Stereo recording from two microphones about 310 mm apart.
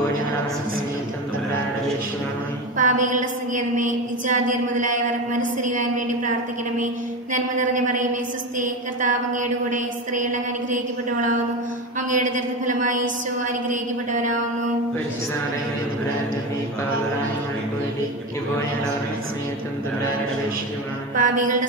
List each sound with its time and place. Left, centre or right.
2.8 s a woman's voice: right
7.3 s a woman's voice: right
12.1 s a woman's voice: right
21.2 s a woman's voice: right